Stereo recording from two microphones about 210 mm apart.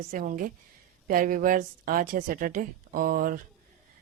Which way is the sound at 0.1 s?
40° right (ahead or behind).